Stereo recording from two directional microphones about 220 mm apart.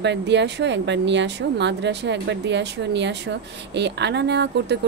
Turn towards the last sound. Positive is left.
turn(degrees=-50)  # may be behind; listen again after turning